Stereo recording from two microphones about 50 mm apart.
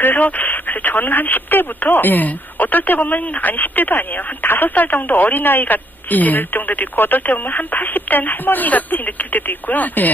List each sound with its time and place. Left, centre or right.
0.0 s speech: left